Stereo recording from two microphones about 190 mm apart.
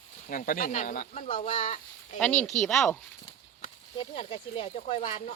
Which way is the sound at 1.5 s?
35° left (ahead or behind).